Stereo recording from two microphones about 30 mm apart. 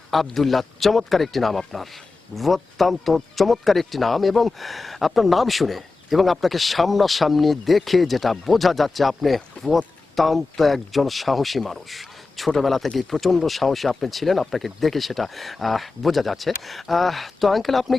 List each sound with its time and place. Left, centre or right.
0.1 s speech: centre